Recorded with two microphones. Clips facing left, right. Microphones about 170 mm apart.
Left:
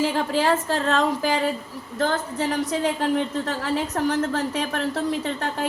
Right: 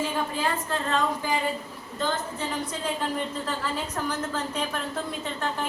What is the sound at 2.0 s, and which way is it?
A woman's voice, 75° left (ahead or behind).